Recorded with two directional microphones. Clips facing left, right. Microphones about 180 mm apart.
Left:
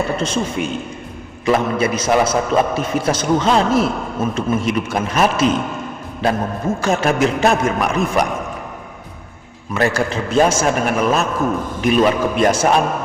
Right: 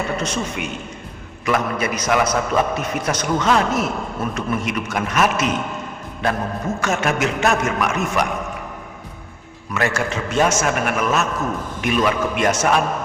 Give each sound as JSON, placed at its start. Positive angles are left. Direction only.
{"t": 0.2, "sound": "a man's voice", "side_deg": 30}
{"t": 6.7, "sound": "a man's voice", "side_deg": 30}
{"t": 9.7, "sound": "a man's voice", "side_deg": 35}